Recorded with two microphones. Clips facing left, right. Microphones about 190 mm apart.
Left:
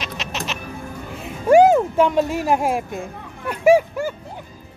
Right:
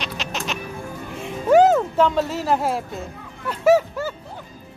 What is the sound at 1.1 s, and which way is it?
Speech, 5° left (ahead or behind).